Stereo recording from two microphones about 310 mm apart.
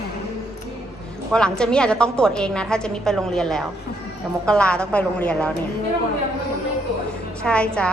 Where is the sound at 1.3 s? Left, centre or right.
Centre.